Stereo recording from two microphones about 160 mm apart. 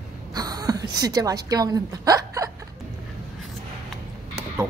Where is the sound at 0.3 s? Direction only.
25° right (ahead or behind).